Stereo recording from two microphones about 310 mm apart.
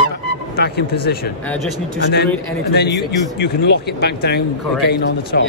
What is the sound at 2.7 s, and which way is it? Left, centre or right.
Speech, left.